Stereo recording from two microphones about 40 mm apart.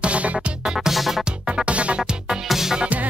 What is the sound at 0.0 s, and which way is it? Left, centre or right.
Music, right.